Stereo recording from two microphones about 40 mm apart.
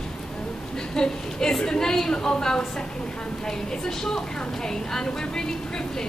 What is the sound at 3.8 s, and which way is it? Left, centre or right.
Speech, centre.